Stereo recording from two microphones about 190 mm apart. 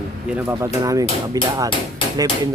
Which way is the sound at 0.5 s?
20° right (ahead or behind).